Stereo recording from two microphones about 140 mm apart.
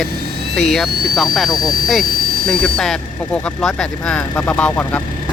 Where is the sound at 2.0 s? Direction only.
90° right.